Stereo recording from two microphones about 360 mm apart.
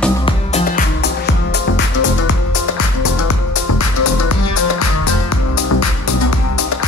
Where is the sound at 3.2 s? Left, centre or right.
Left.